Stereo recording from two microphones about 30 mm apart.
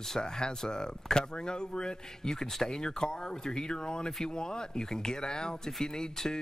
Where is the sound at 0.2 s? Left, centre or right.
Left.